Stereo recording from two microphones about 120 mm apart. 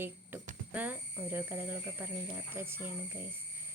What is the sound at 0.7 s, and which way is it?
Speech, 15° right (ahead or behind).